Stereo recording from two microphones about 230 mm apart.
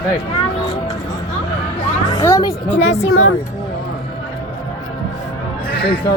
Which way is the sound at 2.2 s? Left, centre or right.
Centre.